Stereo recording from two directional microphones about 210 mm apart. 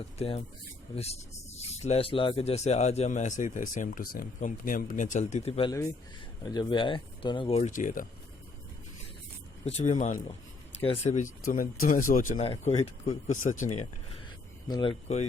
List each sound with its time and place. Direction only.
0.2 s speech: 30° left (ahead or behind)
9.6 s speech: 30° left (ahead or behind)
14.7 s speech: 25° left (ahead or behind)